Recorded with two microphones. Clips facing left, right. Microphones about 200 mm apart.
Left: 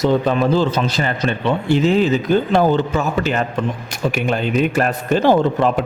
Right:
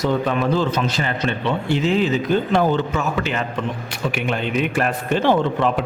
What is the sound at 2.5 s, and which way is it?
A man's voice, 35° left (ahead or behind).